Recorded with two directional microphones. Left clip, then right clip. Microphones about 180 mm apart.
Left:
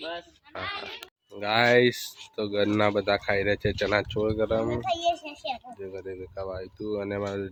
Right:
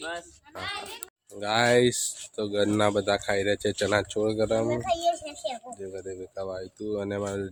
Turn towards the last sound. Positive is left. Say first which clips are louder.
# even
turn(degrees=-5)  # may be behind; listen again after turning